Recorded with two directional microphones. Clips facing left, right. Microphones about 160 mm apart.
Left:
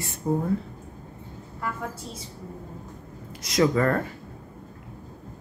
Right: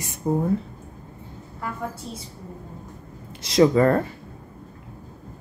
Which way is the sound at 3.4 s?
30° right (ahead or behind).